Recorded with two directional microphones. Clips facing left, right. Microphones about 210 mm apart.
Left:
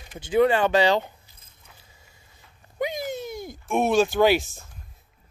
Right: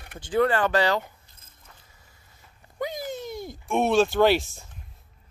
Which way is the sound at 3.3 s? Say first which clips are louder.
Even; centre (ahead or behind).